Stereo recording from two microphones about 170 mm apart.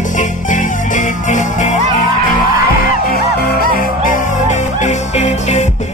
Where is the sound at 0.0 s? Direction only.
45° left (ahead or behind).